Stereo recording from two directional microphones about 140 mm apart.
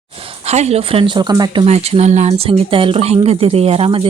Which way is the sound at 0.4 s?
50° right (ahead or behind).